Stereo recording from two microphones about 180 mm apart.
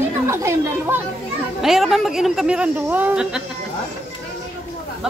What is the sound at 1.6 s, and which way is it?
Speech, centre (ahead or behind).